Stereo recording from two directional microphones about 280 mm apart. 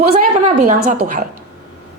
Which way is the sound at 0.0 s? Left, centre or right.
Right.